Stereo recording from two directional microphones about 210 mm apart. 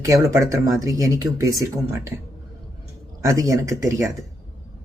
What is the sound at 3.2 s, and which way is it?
Speech, 15° right (ahead or behind).